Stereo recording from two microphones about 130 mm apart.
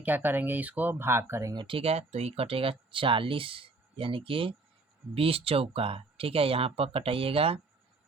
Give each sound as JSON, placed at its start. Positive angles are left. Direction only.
{"t": 0.0, "sound": "speech", "side_deg": -15}
{"t": 1.5, "sound": "speech", "side_deg": -40}